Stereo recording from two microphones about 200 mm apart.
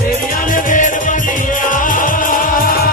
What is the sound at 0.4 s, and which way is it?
Music, 40° left (ahead or behind).